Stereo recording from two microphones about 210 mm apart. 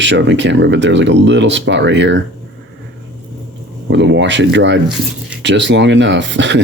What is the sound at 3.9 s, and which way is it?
Speech, 60° right (ahead or behind).